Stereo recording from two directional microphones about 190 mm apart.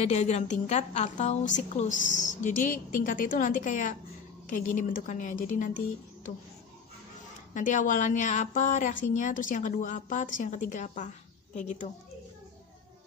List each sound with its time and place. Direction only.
0.0 s a woman's voice: 35° left (ahead or behind)
7.5 s a woman's voice: 45° left (ahead or behind)